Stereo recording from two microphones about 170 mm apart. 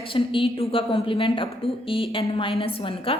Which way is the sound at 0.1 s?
30° left (ahead or behind).